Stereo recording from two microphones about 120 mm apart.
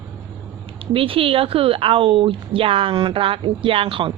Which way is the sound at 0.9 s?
50° right (ahead or behind).